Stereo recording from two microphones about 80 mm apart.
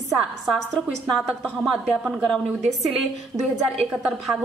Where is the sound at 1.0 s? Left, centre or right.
Centre.